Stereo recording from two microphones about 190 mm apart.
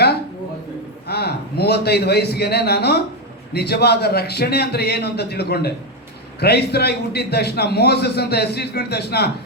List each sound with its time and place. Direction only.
1.0 s a man's voice: 55° left (ahead or behind)